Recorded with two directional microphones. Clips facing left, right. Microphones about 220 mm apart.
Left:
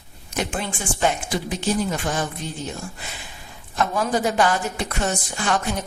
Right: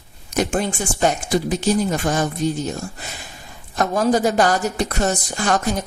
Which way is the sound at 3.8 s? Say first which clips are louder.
Right 5 dB; 40° right (ahead or behind).